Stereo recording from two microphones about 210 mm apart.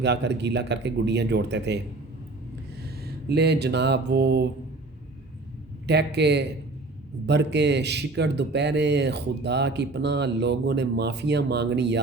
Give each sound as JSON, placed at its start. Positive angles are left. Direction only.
{"t": 0.0, "sound": "speech", "side_deg": -55}
{"t": 2.8, "sound": "mantra", "side_deg": -50}
{"t": 5.9, "sound": "speech", "side_deg": -55}